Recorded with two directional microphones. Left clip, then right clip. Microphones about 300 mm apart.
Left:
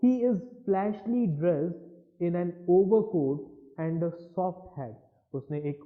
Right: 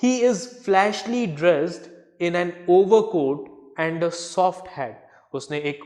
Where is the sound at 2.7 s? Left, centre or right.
Right.